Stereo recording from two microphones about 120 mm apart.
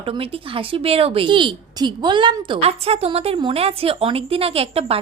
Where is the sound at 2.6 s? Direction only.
55° right (ahead or behind).